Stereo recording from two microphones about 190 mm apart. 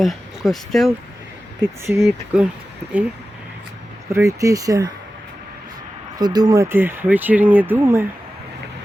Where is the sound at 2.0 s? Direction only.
5° right (ahead or behind).